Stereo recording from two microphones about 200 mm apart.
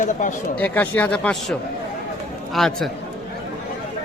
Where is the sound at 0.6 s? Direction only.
10° left (ahead or behind).